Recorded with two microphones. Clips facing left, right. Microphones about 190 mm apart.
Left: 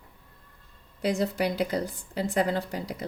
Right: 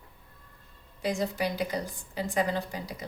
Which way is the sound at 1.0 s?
65° left (ahead or behind).